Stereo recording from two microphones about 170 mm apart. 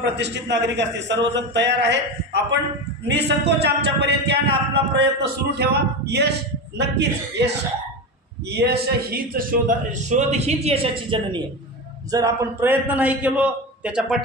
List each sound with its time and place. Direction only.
0.0 s a man's voice: 90° right
6.8 s a man's voice: 90° right
8.5 s a man's voice: 75° right (ahead or behind); by 11.4 s 30° right (ahead or behind)
12.1 s a man's voice: 20° right (ahead or behind)